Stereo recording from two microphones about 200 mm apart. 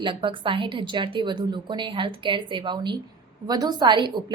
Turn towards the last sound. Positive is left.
turn(degrees=-25)  # may be behind; listen again after turning